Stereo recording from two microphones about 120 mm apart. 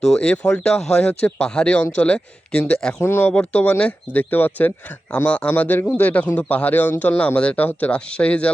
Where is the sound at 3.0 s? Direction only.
15° left (ahead or behind).